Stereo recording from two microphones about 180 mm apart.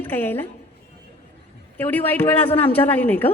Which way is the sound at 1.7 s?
10° left (ahead or behind).